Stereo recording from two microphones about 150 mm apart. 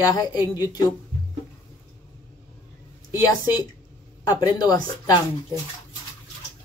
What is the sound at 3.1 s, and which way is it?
Speech, 25° left (ahead or behind).